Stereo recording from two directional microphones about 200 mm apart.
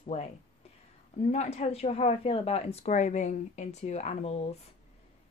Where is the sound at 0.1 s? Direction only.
30° left (ahead or behind).